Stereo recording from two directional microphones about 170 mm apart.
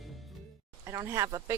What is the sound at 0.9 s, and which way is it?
Speech, 20° right (ahead or behind).